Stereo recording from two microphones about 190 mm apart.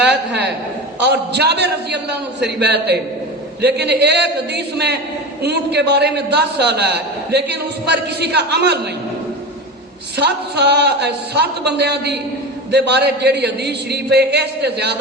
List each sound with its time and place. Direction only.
0.0 s a sound: 5° right (ahead or behind)
1.0 s a man's voice: 60° right (ahead or behind)
10.2 s a man's voice: 60° right (ahead or behind)